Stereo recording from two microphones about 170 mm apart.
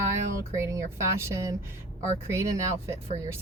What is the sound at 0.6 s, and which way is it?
Speech, 15° right (ahead or behind).